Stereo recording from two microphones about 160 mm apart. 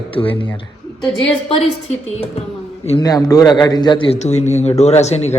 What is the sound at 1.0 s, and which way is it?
Speech, 5° left (ahead or behind).